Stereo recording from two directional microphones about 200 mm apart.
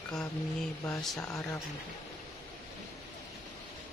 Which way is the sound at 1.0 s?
Centre (ahead or behind).